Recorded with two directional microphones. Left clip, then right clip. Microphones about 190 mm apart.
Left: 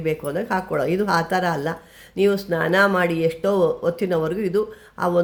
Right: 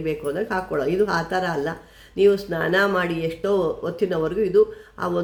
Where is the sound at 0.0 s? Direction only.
35° left (ahead or behind).